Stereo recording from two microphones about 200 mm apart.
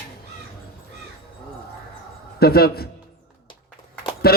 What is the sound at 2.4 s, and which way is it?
Speech, 50° left (ahead or behind).